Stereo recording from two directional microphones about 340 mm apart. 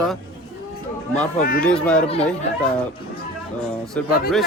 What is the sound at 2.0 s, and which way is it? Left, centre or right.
Speech, centre.